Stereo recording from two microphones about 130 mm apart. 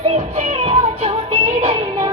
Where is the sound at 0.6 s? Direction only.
50° right (ahead or behind).